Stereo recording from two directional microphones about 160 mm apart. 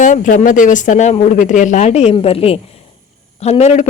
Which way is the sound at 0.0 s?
55° left (ahead or behind).